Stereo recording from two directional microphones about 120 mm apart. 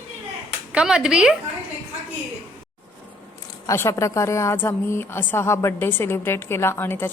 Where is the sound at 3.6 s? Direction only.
20° left (ahead or behind).